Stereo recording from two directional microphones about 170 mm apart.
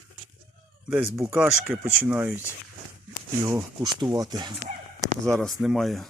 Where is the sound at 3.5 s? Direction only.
20° right (ahead or behind).